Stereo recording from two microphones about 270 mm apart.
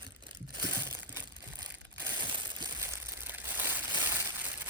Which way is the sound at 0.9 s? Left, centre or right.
Centre.